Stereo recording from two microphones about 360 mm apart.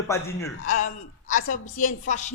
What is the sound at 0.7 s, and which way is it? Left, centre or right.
A woman's voice, left.